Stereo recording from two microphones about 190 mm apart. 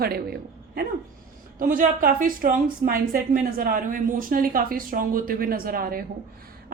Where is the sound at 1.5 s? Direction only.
45° right (ahead or behind).